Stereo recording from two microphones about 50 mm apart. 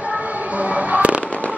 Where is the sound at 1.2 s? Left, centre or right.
Left.